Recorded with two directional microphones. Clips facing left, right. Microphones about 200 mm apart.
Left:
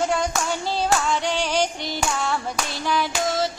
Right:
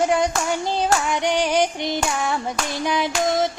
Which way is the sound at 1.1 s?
15° right (ahead or behind).